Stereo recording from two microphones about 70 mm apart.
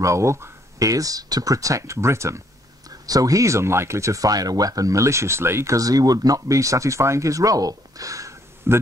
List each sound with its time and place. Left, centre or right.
0.0 s speech: right
3.1 s speech: right
5.8 s speech: right